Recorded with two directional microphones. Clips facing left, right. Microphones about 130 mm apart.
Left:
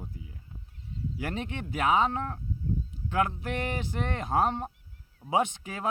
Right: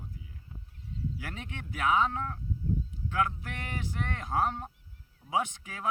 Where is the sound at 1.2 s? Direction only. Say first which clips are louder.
Left 7 dB; 25° left (ahead or behind).